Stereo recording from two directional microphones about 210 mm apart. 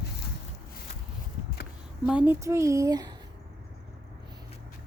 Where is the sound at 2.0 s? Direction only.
5° right (ahead or behind).